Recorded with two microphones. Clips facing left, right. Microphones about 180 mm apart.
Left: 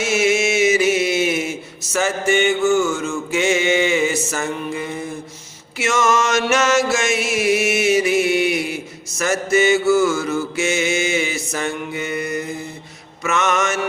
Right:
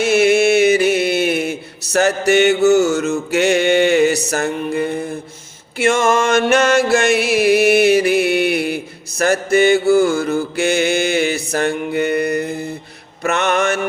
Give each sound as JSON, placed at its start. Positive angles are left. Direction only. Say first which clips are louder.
{"t": 0.0, "sound": "mantra", "louder": "right 5 dB", "side_deg": -60}
{"t": 2.6, "sound": "mantra", "louder": "right 5 dB", "side_deg": -40}
{"t": 2.8, "sound": "a sound", "louder": "right 5 dB", "side_deg": -70}
{"t": 5.8, "sound": "music", "louder": "right 4 dB", "side_deg": -55}
{"t": 10.6, "sound": "mantra", "louder": "right 5 dB", "side_deg": -60}